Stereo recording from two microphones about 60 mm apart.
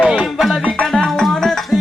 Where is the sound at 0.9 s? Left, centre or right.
Centre.